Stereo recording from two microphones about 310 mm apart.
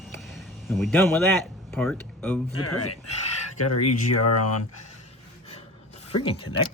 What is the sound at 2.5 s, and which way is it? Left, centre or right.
Speech, left.